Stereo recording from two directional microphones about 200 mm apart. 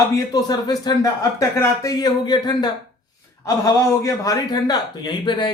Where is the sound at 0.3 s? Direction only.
20° left (ahead or behind).